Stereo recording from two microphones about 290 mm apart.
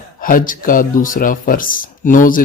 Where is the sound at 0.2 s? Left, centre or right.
Left.